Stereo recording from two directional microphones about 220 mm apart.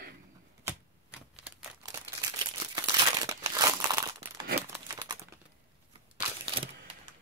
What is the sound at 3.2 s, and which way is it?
Crumpling, 15° right (ahead or behind).